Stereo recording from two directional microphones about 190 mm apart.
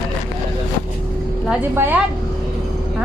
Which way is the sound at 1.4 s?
10° right (ahead or behind).